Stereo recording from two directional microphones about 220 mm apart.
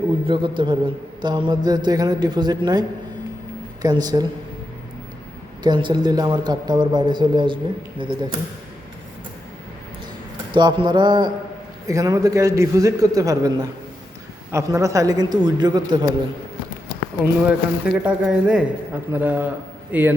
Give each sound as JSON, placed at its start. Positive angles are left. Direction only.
{"t": 0.3, "sound": "a man's voice", "side_deg": -20}
{"t": 3.8, "sound": "a man's voice", "side_deg": -20}
{"t": 5.6, "sound": "a man's voice", "side_deg": -20}
{"t": 10.5, "sound": "a man's voice", "side_deg": -20}
{"t": 17.2, "sound": "a man's voice", "side_deg": -5}